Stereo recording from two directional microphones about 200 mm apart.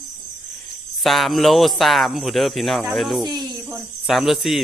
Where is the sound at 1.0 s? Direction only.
Centre (ahead or behind).